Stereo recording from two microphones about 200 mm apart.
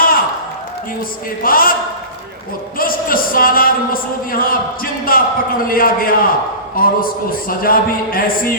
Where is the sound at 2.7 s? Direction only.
45° left (ahead or behind).